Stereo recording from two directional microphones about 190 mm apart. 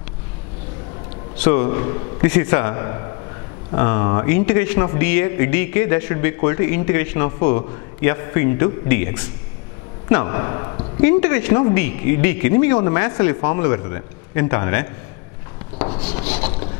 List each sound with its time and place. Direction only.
1.4 s a man's voice: 15° left (ahead or behind)
2.2 s a man's voice: 10° left (ahead or behind)
11.1 s speech: 10° left (ahead or behind)
15.8 s rub: 35° left (ahead or behind)
16.3 s vehicle: 40° left (ahead or behind)